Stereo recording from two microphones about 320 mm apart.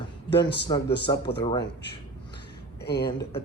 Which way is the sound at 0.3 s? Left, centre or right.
Left.